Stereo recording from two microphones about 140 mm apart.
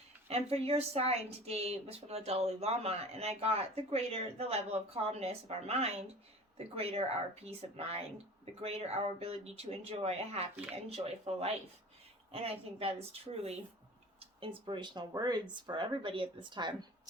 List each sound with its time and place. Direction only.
0.3 s a woman's voice: 45° right (ahead or behind)